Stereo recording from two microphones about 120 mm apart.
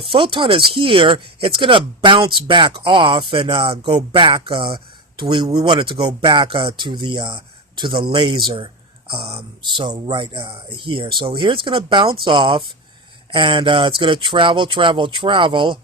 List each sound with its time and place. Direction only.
0.1 s speech: 45° right (ahead or behind)
9.6 s speech: 40° right (ahead or behind)